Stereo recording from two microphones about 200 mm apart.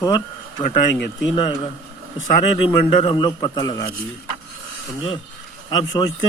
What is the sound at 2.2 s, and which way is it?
A man's voice, 25° left (ahead or behind).